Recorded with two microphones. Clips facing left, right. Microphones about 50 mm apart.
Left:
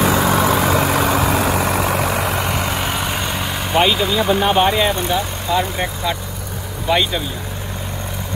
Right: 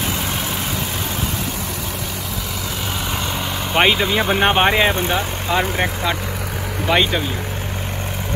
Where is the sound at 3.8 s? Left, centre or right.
Right.